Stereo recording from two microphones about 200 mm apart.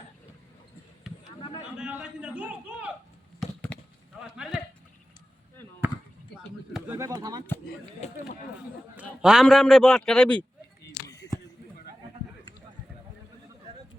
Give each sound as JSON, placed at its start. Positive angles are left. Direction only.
{"t": 1.8, "sound": "a man's voice", "side_deg": -5}
{"t": 3.4, "sound": "a sound", "side_deg": 5}
{"t": 4.2, "sound": "speech", "side_deg": -5}
{"t": 6.7, "sound": "speech", "side_deg": -10}
{"t": 8.0, "sound": "speech", "side_deg": 35}
{"t": 9.2, "sound": "a man's voice", "side_deg": 0}